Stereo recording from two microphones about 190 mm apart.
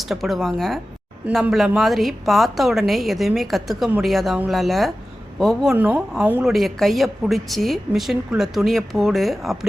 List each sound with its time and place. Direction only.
0.1 s a woman's voice: centre (ahead or behind)